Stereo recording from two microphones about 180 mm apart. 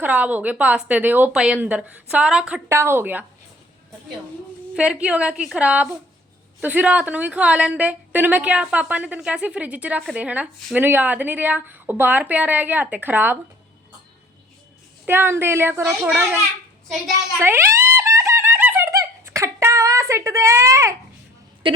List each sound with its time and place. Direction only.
0.0 s a woman's voice: 10° right (ahead or behind)
4.7 s a woman's voice: 5° right (ahead or behind)
15.0 s a woman's voice: 10° right (ahead or behind)
17.4 s a sound: 15° right (ahead or behind)